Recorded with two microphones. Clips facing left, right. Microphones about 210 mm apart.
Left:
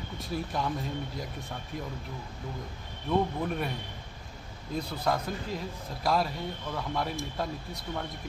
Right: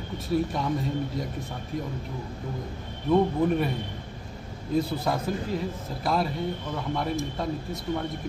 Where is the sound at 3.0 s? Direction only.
Centre (ahead or behind).